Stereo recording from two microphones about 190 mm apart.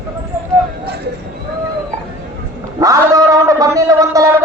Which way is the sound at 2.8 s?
15° right (ahead or behind).